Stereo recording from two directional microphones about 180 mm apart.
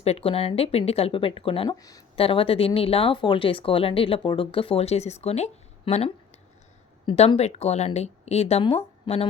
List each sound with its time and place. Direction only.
0.0 s speech: 35° left (ahead or behind)